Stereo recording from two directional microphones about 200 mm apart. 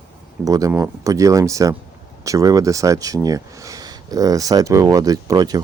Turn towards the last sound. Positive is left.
turn(degrees=-20)  # may be behind; listen again after turning